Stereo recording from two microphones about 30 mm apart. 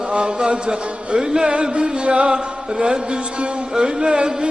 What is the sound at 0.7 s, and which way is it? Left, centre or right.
Music, right.